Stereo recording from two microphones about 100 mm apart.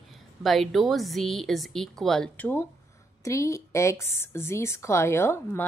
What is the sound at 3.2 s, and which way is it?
A woman's voice, 30° left (ahead or behind).